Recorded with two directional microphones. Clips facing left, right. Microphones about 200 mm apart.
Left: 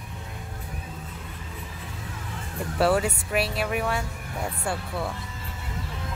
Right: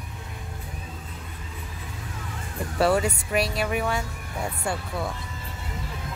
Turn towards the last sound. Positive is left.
turn(degrees=5)  # may be behind; listen again after turning